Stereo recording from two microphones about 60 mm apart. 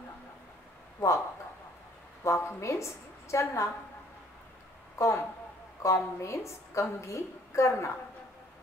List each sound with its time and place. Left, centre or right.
2.2 s a woman's voice: left
4.9 s a woman's voice: left